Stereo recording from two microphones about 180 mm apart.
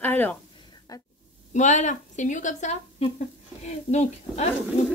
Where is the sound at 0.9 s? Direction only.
20° left (ahead or behind).